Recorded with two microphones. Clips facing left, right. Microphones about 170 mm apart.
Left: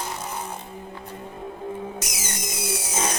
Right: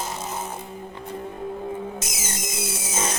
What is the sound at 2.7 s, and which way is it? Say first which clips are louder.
Music: left 3 dB; 50° right (ahead or behind).